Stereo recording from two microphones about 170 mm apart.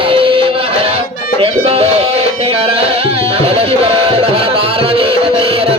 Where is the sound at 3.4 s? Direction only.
35° right (ahead or behind).